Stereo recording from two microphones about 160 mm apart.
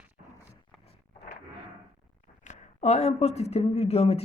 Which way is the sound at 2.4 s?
45° left (ahead or behind).